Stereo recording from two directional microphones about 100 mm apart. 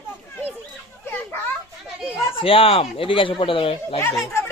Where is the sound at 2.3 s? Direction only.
65° left (ahead or behind).